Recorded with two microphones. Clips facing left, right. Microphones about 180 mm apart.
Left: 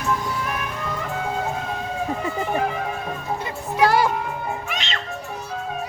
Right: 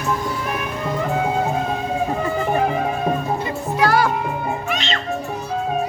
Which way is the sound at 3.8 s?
25° left (ahead or behind).